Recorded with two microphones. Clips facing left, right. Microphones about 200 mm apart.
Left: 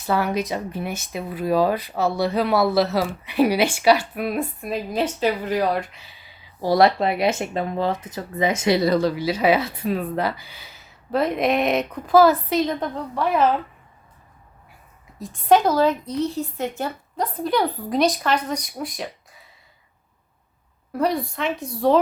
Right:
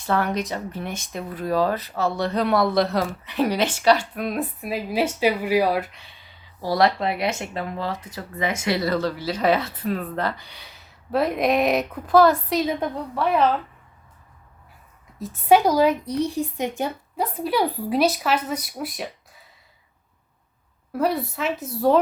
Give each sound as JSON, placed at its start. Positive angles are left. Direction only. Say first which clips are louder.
{"t": 0.0, "sound": "speech", "louder": "left 1 dB", "side_deg": 5}
{"t": 6.6, "sound": "speech", "louder": "left 3 dB", "side_deg": 20}
{"t": 15.2, "sound": "a woman's voice", "louder": "even", "side_deg": -5}
{"t": 20.9, "sound": "speech", "louder": "left 1 dB", "side_deg": -5}